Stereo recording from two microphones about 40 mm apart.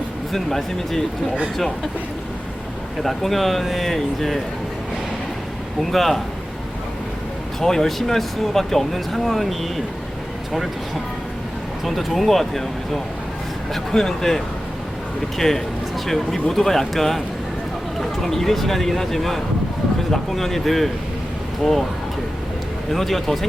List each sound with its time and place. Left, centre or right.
0.3 s speech: centre
3.0 s speech: centre
5.9 s speech: centre
7.6 s speech: centre
11.9 s speech: centre
22.9 s speech: centre